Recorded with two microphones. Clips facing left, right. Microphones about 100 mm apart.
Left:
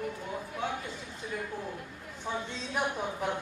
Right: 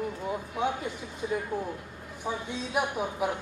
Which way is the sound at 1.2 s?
20° right (ahead or behind).